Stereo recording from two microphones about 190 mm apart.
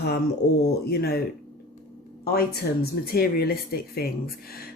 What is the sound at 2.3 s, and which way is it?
Speech, 55° left (ahead or behind).